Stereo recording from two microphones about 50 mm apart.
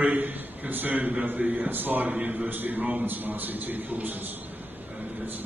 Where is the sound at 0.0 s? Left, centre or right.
Right.